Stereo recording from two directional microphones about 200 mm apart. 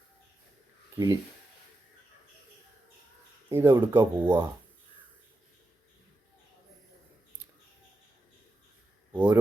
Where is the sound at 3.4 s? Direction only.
10° right (ahead or behind).